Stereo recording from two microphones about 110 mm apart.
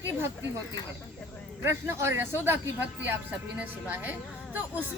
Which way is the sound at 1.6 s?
25° right (ahead or behind).